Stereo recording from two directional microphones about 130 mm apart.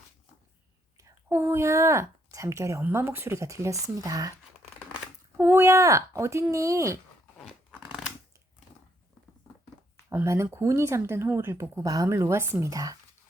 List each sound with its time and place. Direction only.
0.9 s a woman's voice: 20° right (ahead or behind)
5.4 s a woman's voice: 20° right (ahead or behind)
10.1 s a woman's voice: 20° right (ahead or behind)